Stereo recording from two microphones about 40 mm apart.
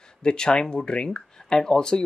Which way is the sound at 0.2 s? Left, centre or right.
Left.